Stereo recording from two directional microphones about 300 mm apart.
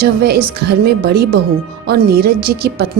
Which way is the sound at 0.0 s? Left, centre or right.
Right.